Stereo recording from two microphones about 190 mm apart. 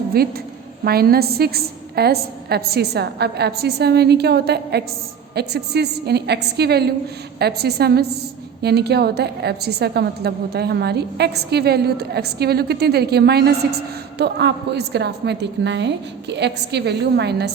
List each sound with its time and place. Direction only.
0.1 s a woman's voice: 55° right (ahead or behind)